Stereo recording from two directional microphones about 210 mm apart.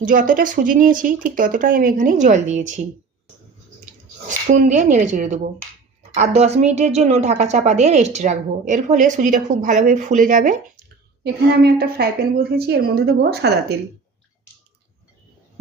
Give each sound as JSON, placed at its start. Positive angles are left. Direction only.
{"t": 0.0, "sound": "a woman's voice", "side_deg": -40}
{"t": 4.3, "sound": "a woman's voice", "side_deg": -40}
{"t": 11.2, "sound": "a woman's voice", "side_deg": -50}